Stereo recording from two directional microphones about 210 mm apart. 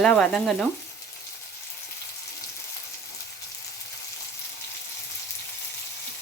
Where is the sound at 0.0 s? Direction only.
5° left (ahead or behind).